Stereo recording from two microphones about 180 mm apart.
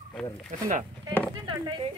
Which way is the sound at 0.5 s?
45° right (ahead or behind).